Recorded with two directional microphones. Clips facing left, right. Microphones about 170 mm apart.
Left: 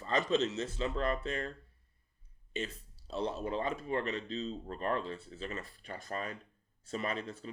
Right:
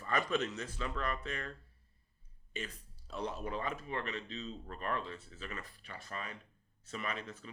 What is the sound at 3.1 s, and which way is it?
Speech, 30° left (ahead or behind).